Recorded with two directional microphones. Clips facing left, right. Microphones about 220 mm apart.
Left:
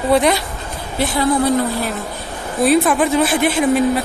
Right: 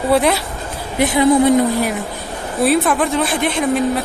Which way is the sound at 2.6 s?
Centre (ahead or behind).